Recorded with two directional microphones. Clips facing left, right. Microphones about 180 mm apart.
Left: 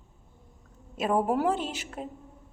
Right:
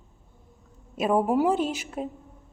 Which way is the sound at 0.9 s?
10° right (ahead or behind).